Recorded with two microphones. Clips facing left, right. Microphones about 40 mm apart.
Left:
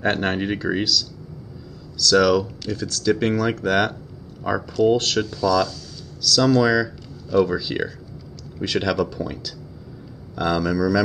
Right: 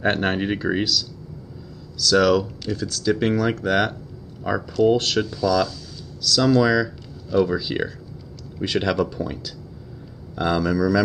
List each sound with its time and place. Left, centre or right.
0.0 s speech: centre